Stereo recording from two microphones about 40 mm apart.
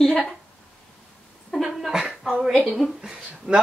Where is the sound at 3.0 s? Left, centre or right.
Centre.